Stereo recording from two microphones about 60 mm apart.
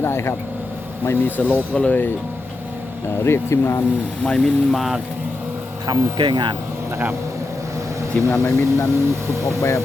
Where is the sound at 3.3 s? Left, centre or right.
Left.